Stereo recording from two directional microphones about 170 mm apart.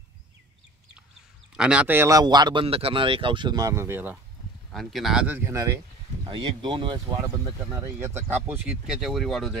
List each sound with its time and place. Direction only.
1.6 s speech: 5° right (ahead or behind)
4.7 s speech: centre (ahead or behind); by 5.8 s 15° right (ahead or behind)
6.2 s speech: 30° right (ahead or behind)
7.8 s speech: 15° right (ahead or behind); by 9.6 s centre (ahead or behind)